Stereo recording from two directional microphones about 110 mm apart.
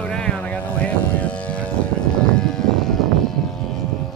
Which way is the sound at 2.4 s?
5° left (ahead or behind).